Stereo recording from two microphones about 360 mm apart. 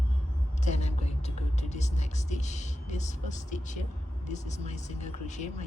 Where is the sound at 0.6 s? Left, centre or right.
Centre.